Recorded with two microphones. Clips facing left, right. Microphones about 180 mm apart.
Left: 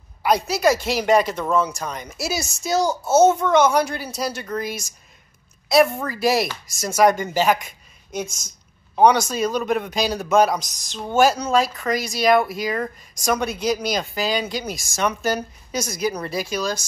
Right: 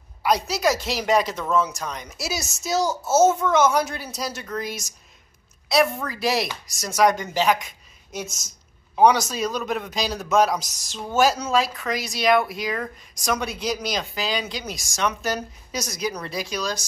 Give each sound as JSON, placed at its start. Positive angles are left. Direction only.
{"t": 0.2, "sound": "a woman's voice", "side_deg": 0}
{"t": 6.0, "sound": "a woman's voice", "side_deg": 0}